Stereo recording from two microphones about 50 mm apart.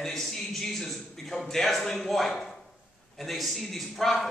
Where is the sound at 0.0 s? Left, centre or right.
Centre.